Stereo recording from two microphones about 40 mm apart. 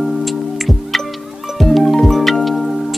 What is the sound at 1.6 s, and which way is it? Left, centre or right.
Music, centre.